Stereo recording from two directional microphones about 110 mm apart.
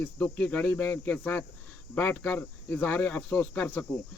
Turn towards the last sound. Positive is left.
turn(degrees=15)  # may be behind; listen again after turning